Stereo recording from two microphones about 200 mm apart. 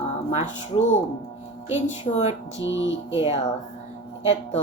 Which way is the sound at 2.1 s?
25° left (ahead or behind).